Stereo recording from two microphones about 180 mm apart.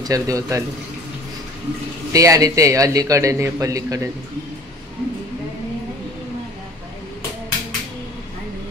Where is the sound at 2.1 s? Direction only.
20° right (ahead or behind).